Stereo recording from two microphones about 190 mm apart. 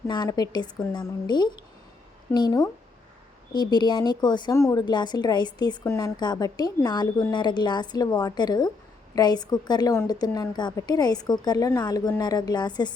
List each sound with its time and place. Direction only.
0.1 s speech: 20° left (ahead or behind)